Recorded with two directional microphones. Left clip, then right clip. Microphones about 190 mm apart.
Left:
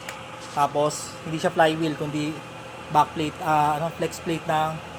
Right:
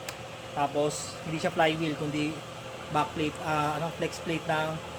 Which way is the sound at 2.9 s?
40° left (ahead or behind).